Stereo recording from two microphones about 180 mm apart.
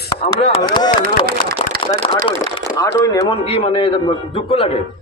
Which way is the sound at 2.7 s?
20° left (ahead or behind).